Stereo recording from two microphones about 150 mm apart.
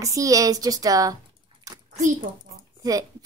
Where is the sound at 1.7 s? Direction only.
20° right (ahead or behind).